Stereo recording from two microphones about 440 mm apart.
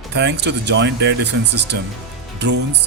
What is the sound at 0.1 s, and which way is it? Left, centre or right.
Speech, right.